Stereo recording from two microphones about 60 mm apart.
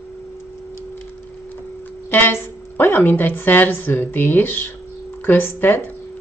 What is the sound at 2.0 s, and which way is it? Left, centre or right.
A woman's voice, left.